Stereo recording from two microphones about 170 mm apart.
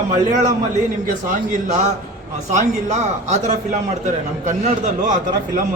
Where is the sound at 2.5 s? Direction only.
45° right (ahead or behind).